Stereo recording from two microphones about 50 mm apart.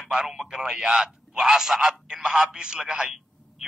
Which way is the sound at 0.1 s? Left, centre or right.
Centre.